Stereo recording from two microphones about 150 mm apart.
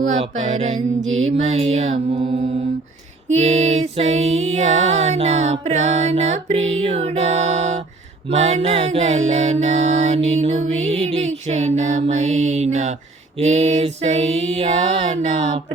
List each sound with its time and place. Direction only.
0.0 s mantra: 55° right (ahead or behind)